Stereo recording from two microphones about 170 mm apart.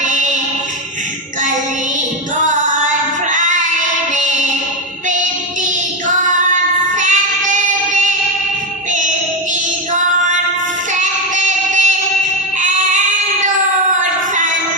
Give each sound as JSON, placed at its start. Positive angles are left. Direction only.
{"t": 0.0, "sound": "music", "side_deg": -45}
{"t": 3.2, "sound": "female singing", "side_deg": -45}
{"t": 4.1, "sound": "child singing", "side_deg": -45}
{"t": 6.1, "sound": "child singing", "side_deg": -50}
{"t": 8.9, "sound": "child singing", "side_deg": -45}
{"t": 10.9, "sound": "child singing", "side_deg": -45}